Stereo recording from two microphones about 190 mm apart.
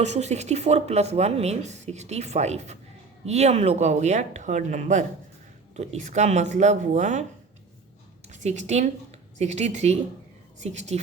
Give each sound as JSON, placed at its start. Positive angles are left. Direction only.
{"t": 0.0, "sound": "speech", "side_deg": -35}
{"t": 8.3, "sound": "a woman's voice", "side_deg": -40}